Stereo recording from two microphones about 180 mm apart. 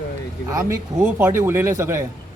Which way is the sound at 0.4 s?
15° right (ahead or behind).